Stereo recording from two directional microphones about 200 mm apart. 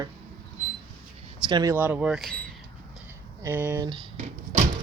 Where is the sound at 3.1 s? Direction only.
10° right (ahead or behind).